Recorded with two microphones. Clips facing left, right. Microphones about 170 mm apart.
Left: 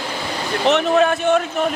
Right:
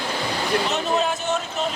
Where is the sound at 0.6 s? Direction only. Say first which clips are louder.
Left 8 dB; 65° left (ahead or behind).